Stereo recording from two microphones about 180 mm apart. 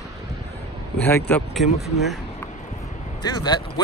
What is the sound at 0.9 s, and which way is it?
Speech, 10° left (ahead or behind).